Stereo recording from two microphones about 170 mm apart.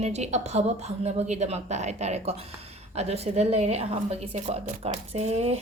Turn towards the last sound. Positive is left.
turn(degrees=-40)  # may be behind; listen again after turning